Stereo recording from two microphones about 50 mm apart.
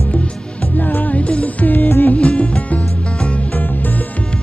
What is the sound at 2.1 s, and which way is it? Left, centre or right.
Music, left.